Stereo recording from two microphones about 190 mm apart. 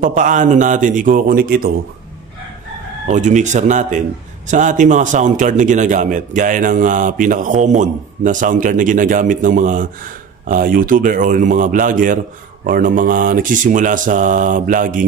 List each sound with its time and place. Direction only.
0.0 s a man's voice: 40° right (ahead or behind)
3.1 s a man's voice: 40° right (ahead or behind)